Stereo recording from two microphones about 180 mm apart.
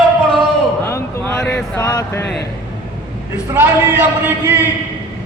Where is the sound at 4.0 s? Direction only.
10° right (ahead or behind).